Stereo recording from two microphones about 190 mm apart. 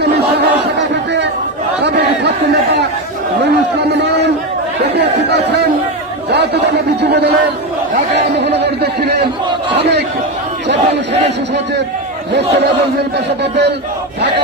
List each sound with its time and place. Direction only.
0.0 s crowd: 60° right (ahead or behind)
1.8 s chatter: 60° right (ahead or behind)
3.7 s a sound: 60° right (ahead or behind)
4.9 s chatter: 60° right (ahead or behind)
6.3 s a sound: 60° right (ahead or behind)
12.4 s battle cry: 65° right (ahead or behind)